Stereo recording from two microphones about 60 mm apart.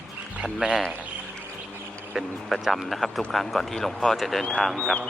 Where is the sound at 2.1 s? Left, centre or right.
Centre.